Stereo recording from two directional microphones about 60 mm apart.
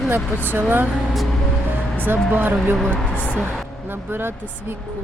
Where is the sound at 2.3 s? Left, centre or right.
Right.